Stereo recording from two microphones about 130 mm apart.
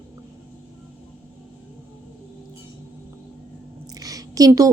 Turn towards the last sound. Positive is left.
turn(degrees=-25)  # may be behind; listen again after turning